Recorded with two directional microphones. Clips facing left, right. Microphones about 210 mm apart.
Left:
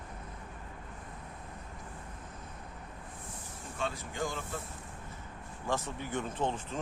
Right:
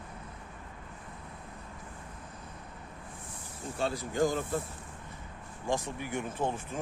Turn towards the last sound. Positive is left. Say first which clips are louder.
# right 1 dB
turn(degrees=-10)  # may be behind; listen again after turning